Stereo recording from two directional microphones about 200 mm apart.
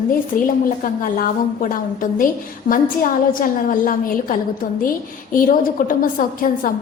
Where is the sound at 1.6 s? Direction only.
45° left (ahead or behind).